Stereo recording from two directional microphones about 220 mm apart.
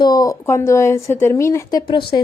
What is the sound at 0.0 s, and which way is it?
A woman's voice, 15° left (ahead or behind).